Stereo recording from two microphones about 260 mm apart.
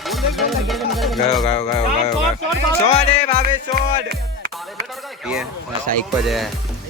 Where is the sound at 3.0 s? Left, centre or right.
Left.